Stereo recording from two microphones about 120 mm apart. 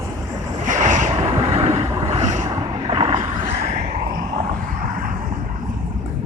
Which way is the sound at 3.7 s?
90° right.